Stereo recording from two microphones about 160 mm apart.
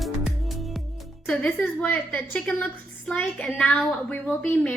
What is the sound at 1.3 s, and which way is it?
A woman's voice, 5° left (ahead or behind).